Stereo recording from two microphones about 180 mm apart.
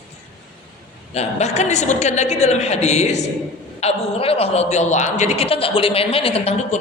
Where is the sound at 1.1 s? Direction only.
35° left (ahead or behind).